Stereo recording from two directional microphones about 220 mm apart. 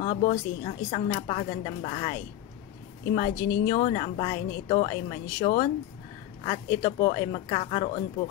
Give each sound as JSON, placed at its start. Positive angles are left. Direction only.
{"t": 0.0, "sound": "a woman's voice", "side_deg": 30}
{"t": 3.2, "sound": "a woman's voice", "side_deg": 20}